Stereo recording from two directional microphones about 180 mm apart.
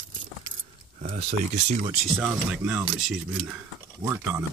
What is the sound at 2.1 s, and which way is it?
Speech, 5° right (ahead or behind).